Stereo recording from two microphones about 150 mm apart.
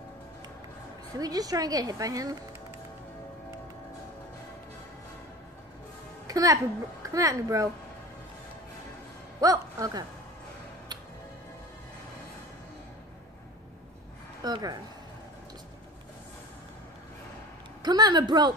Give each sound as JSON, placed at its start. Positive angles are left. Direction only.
{"t": 1.1, "sound": "a child's voice", "side_deg": -25}
{"t": 6.2, "sound": "a child's voice", "side_deg": -25}
{"t": 9.4, "sound": "speech", "side_deg": -25}
{"t": 14.4, "sound": "speech", "side_deg": -25}
{"t": 17.8, "sound": "a child's voice", "side_deg": -30}